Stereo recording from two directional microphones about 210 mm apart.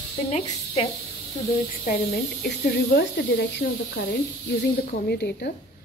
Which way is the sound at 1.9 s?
45° left (ahead or behind).